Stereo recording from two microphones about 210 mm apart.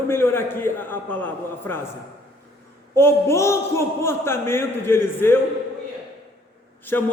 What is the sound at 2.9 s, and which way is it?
A man's voice, 10° left (ahead or behind).